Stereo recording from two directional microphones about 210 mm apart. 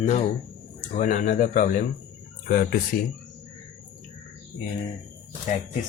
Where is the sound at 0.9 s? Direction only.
40° left (ahead or behind).